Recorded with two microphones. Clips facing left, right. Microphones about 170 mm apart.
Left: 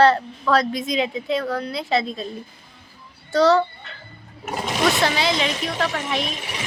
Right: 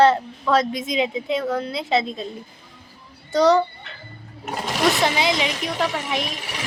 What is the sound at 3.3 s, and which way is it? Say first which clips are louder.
Speech: even; 20° right (ahead or behind).